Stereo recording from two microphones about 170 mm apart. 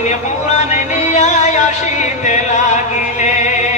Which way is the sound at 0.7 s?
45° left (ahead or behind).